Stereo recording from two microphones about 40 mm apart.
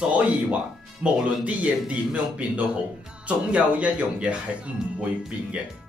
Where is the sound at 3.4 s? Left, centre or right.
Right.